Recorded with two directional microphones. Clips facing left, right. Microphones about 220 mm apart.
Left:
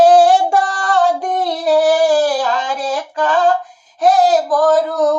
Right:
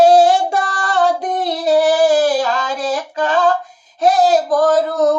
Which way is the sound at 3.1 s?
25° right (ahead or behind).